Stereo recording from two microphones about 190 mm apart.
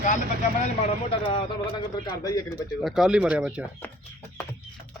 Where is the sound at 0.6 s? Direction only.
35° left (ahead or behind).